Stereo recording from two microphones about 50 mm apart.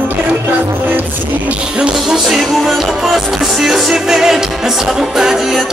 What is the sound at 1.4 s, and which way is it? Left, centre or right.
Music, right.